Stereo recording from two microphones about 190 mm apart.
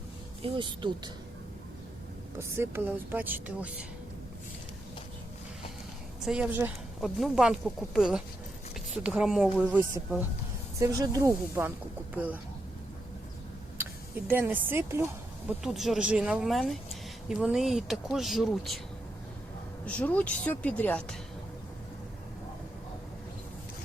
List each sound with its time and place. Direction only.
0.4 s speech: 25° right (ahead or behind)
2.4 s speech: 15° right (ahead or behind)
6.2 s speech: 5° right (ahead or behind)
14.3 s speech: 10° right (ahead or behind)
15.4 s speech: centre (ahead or behind)
19.8 s speech: 10° left (ahead or behind)